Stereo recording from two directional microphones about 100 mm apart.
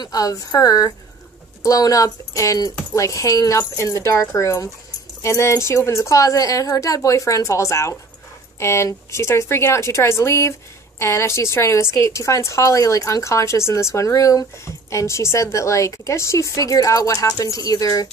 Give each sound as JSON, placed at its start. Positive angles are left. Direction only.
{"t": 0.0, "sound": "a woman's voice", "side_deg": 35}